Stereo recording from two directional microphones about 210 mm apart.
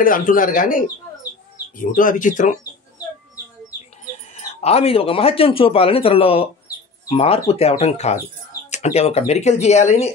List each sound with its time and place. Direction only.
0.0 s speech: 40° left (ahead or behind)
4.6 s speech: 30° left (ahead or behind)